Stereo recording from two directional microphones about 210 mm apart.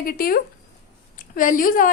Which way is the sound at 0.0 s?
45° left (ahead or behind).